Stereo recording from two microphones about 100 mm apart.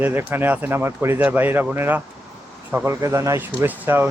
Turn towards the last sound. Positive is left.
turn(degrees=-20)  # may be behind; listen again after turning